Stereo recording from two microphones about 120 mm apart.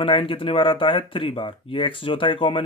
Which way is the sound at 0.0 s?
45° left (ahead or behind).